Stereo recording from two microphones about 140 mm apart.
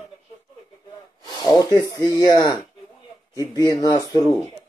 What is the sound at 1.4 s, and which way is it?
Speech, 25° left (ahead or behind).